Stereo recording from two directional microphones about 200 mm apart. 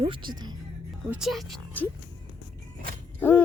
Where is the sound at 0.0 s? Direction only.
25° right (ahead or behind).